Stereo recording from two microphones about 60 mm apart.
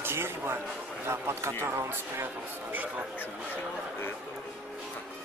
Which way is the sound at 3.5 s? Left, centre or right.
Left.